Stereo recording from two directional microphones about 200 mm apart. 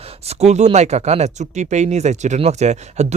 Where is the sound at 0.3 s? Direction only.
35° right (ahead or behind).